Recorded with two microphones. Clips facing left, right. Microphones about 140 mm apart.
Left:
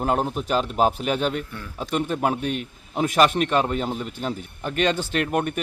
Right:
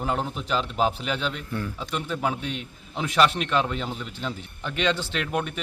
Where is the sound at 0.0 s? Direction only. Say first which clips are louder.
Left 5 dB; 50° left (ahead or behind).